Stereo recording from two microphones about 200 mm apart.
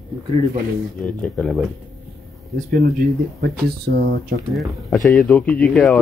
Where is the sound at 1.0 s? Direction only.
Centre (ahead or behind).